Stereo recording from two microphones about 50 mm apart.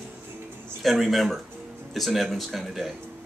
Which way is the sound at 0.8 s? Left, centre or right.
Centre.